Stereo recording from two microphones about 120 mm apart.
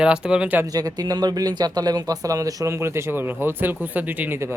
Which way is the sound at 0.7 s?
30° right (ahead or behind).